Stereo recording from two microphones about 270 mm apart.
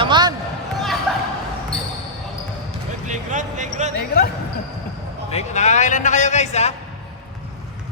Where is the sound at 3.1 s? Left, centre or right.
Right.